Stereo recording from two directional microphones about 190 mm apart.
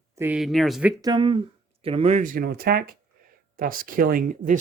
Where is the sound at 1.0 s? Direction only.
25° right (ahead or behind).